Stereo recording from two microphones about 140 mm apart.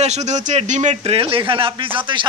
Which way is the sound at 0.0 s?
55° right (ahead or behind).